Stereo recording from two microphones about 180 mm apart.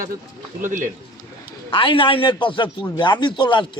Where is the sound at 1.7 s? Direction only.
30° left (ahead or behind).